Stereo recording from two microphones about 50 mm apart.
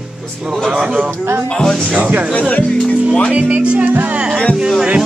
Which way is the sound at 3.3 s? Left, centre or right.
Right.